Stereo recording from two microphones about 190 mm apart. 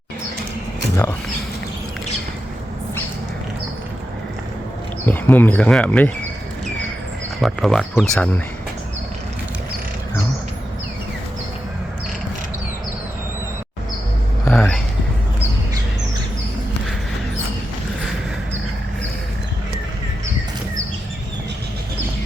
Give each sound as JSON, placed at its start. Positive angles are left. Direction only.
{"t": 5.0, "sound": "speech", "side_deg": 10}
{"t": 7.4, "sound": "speech", "side_deg": 0}
{"t": 14.5, "sound": "a sound", "side_deg": 15}